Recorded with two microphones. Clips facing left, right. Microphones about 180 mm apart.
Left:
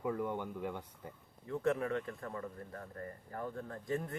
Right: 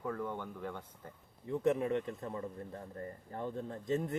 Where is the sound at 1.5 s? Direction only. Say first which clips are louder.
Right 2 dB; 20° right (ahead or behind).